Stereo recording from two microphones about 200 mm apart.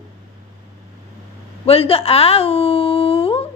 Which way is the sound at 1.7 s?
30° left (ahead or behind).